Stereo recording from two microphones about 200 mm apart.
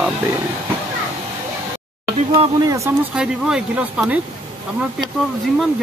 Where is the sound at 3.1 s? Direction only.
5° right (ahead or behind).